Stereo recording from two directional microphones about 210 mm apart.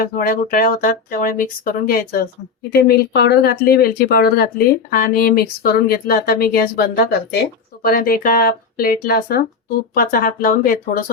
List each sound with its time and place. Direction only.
0.2 s speech: 45° left (ahead or behind)